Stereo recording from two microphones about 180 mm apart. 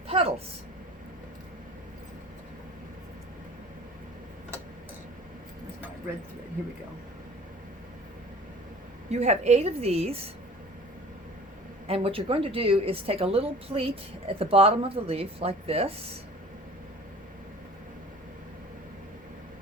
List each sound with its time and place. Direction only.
0.1 s vehicle: 30° right (ahead or behind)
9.0 s a woman's voice: 40° right (ahead or behind)
11.9 s a woman's voice: 30° right (ahead or behind)